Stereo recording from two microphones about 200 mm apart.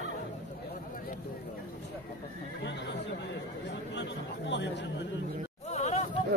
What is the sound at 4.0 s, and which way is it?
Chatter, 60° left (ahead or behind).